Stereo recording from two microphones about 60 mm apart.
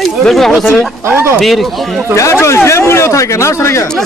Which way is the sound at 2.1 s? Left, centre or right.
Left.